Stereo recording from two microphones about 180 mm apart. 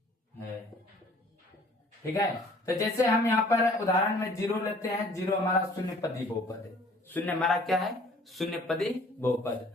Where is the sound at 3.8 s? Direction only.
15° left (ahead or behind).